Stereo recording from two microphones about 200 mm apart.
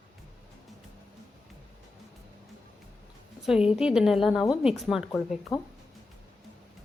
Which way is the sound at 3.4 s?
5° right (ahead or behind).